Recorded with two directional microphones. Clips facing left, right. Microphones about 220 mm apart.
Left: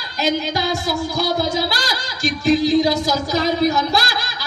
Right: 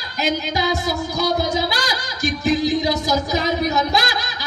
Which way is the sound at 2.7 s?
20° right (ahead or behind).